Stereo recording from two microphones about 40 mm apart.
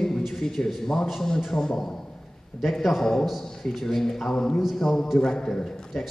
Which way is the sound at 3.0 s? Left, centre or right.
Centre.